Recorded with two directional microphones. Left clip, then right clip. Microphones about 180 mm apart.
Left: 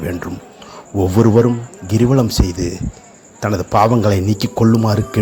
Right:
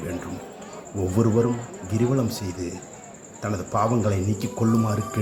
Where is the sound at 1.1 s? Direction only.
45° left (ahead or behind).